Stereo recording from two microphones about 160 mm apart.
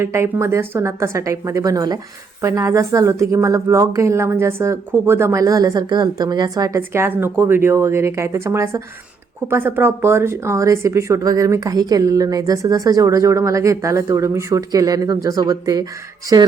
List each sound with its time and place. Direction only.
0.0 s a woman's voice: 15° right (ahead or behind)